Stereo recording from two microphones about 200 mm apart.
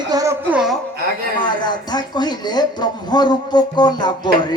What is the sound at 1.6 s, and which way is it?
Speech, 20° left (ahead or behind).